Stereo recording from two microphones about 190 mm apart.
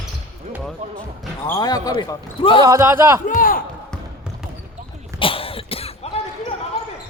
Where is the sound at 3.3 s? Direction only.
45° left (ahead or behind).